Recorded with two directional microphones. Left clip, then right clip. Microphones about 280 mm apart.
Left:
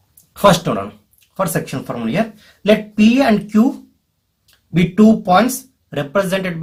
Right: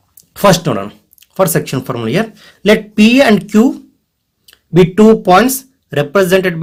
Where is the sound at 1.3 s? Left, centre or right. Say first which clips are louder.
Right 7 dB; right.